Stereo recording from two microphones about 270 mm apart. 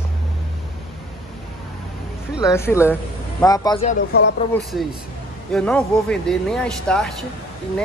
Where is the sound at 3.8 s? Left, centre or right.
Left.